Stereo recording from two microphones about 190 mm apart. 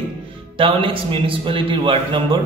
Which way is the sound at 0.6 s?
30° right (ahead or behind).